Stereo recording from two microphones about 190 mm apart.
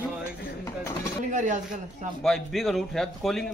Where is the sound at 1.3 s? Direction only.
40° right (ahead or behind).